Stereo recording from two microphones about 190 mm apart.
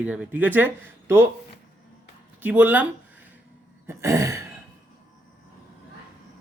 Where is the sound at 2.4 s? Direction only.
10° right (ahead or behind).